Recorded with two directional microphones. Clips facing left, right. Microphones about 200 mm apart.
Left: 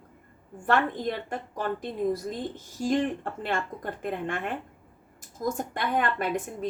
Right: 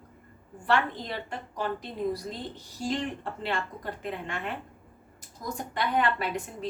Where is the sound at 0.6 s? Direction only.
50° left (ahead or behind).